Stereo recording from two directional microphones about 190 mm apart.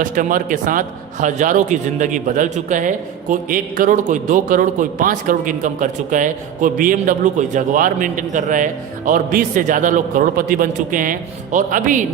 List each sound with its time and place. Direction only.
0.0 s a man's voice: 45° right (ahead or behind)